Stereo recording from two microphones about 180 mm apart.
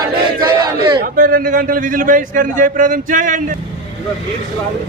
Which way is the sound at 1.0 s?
50° right (ahead or behind).